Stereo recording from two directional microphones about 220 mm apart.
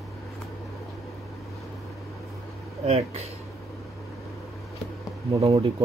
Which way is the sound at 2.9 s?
30° right (ahead or behind).